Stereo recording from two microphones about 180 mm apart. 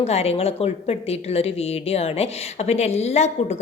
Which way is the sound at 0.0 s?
35° left (ahead or behind).